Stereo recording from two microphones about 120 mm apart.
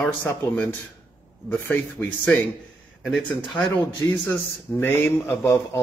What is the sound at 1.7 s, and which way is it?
Speech, 15° left (ahead or behind).